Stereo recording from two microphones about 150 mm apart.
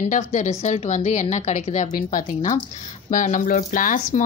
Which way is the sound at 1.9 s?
65° left (ahead or behind).